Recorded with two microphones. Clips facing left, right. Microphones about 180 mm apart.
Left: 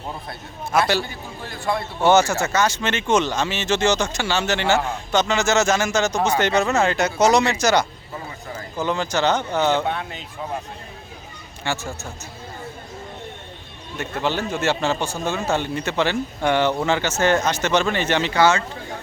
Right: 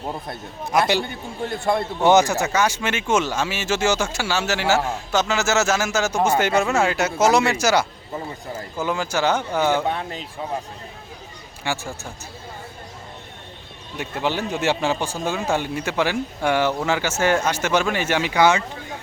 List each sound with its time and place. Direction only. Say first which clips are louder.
0.7 s speech: even; 15° right (ahead or behind)
11.6 s speech: even; 10° right (ahead or behind)
13.9 s speech: even; 10° right (ahead or behind)